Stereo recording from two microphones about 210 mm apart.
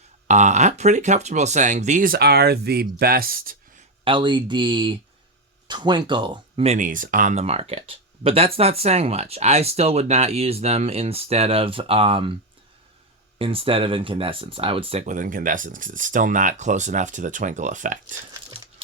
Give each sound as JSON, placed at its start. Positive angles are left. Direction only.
{"t": 0.3, "sound": "speech", "side_deg": -35}
{"t": 4.0, "sound": "speech", "side_deg": -20}
{"t": 13.4, "sound": "speech", "side_deg": -25}